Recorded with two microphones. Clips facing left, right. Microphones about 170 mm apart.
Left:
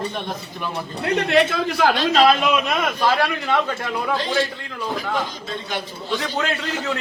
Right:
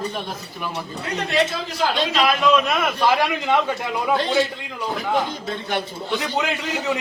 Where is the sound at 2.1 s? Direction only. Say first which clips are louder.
Left 5 dB; 30° left (ahead or behind).